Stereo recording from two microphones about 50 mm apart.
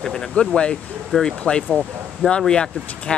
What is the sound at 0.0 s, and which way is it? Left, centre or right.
Speech, centre.